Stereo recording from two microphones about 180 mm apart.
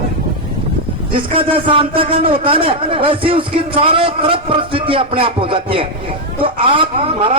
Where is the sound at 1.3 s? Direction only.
30° right (ahead or behind).